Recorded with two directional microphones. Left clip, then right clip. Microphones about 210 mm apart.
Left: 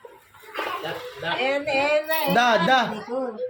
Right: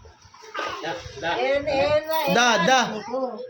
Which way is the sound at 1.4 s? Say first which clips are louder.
Right 1 dB; 10° right (ahead or behind).